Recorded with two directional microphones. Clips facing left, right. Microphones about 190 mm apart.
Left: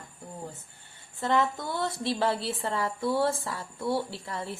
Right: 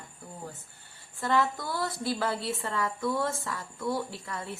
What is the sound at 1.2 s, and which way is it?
A woman's voice, 20° left (ahead or behind).